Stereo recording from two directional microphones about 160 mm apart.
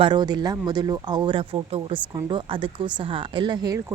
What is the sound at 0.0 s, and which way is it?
Speech, 30° right (ahead or behind).